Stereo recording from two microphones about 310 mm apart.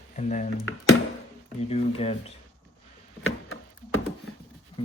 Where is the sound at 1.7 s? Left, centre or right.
Centre.